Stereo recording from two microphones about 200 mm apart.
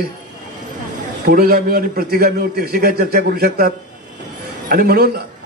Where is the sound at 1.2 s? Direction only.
50° right (ahead or behind).